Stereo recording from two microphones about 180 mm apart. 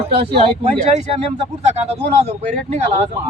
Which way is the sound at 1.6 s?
35° right (ahead or behind).